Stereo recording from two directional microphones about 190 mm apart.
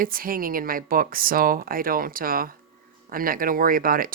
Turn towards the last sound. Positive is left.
turn(degrees=-50)  # may be behind; listen again after turning